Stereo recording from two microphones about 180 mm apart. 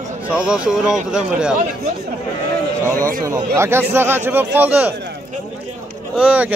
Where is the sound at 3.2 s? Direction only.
15° right (ahead or behind).